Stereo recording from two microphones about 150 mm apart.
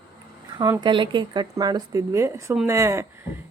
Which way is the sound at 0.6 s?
30° right (ahead or behind).